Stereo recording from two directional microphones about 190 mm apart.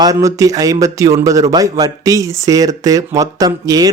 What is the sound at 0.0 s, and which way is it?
Speech, 15° right (ahead or behind).